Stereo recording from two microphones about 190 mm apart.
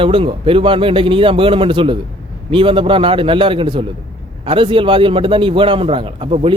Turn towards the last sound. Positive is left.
turn(degrees=-30)  # may be behind; listen again after turning